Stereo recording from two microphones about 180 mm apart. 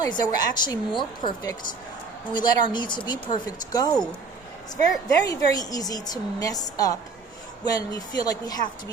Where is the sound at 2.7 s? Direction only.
25° left (ahead or behind).